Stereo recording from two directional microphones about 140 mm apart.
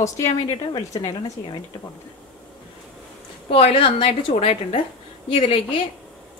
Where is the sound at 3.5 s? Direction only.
45° left (ahead or behind).